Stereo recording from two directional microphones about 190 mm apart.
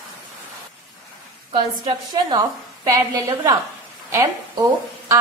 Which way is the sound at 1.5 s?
25° right (ahead or behind).